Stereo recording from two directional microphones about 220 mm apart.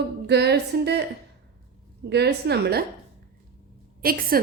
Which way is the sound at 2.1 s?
50° right (ahead or behind).